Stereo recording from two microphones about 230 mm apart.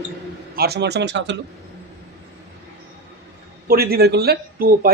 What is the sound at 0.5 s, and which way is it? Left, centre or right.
Speech, right.